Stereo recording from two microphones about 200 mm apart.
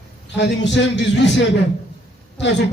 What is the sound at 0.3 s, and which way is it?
A man's voice, 60° left (ahead or behind).